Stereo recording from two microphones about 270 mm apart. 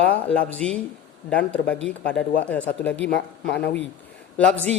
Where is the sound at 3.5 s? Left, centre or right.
Left.